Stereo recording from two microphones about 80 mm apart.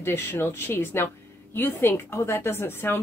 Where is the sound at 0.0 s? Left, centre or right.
Left.